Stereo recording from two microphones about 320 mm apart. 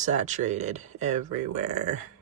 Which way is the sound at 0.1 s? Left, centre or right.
Right.